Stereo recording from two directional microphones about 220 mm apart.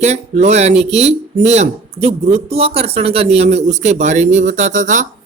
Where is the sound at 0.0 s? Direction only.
30° right (ahead or behind).